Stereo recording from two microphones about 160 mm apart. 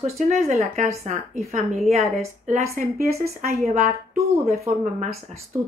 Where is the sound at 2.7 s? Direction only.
60° right (ahead or behind).